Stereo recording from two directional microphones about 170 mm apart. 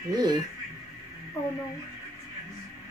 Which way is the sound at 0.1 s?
25° right (ahead or behind).